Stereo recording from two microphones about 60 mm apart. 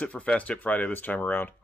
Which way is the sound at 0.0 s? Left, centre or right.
Left.